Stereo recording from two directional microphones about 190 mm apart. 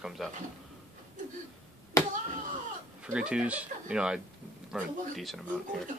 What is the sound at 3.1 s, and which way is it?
Speech, 5° right (ahead or behind).